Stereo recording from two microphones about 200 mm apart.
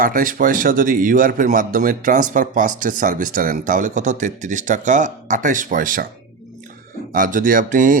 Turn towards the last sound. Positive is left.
turn(degrees=-40)  # may be behind; listen again after turning